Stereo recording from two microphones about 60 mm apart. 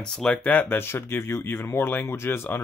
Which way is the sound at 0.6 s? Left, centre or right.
Left.